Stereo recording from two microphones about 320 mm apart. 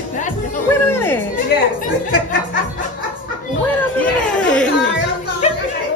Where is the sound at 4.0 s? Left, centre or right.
Centre.